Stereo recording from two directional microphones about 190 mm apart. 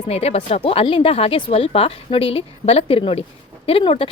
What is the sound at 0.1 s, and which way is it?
A woman's voice, 35° left (ahead or behind).